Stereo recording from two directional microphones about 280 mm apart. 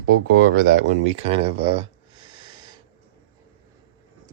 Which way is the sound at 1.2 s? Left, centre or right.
Centre.